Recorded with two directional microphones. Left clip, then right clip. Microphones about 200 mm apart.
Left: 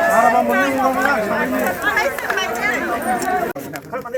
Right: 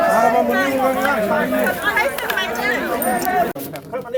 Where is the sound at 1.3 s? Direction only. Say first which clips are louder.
Right 1 dB; 15° right (ahead or behind).